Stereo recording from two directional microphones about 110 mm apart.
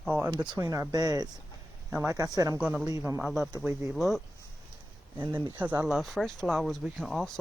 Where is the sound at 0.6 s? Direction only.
25° right (ahead or behind).